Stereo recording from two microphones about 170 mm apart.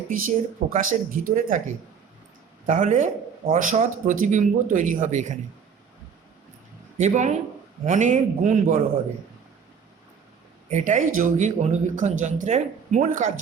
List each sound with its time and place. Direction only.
0.1 s speech: 50° right (ahead or behind)
7.0 s speech: 45° right (ahead or behind)
10.7 s speech: 45° right (ahead or behind)